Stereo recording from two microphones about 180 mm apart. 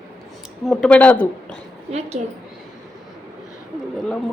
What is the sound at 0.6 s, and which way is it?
Speech, 5° left (ahead or behind).